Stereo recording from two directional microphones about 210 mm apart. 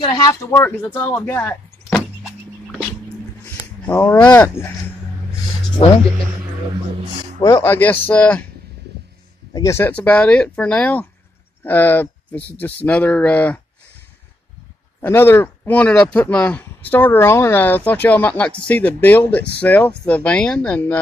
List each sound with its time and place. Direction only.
0.0 s speech: 20° left (ahead or behind)
3.8 s speech: 10° left (ahead or behind)
5.8 s speech: 30° left (ahead or behind)
7.4 s speech: 10° left (ahead or behind)
9.5 s speech: 15° left (ahead or behind)
15.0 s speech: 10° left (ahead or behind)